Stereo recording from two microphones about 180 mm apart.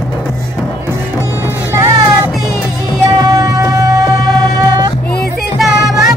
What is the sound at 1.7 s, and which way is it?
Music, 15° right (ahead or behind).